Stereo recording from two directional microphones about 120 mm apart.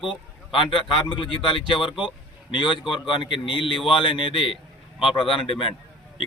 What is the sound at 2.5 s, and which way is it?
A man's voice, 40° left (ahead or behind).